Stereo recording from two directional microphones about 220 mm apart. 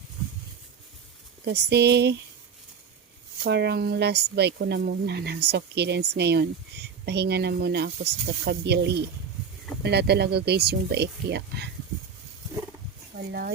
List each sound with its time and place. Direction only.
1.5 s speech: 50° right (ahead or behind)
3.4 s speech: 50° right (ahead or behind)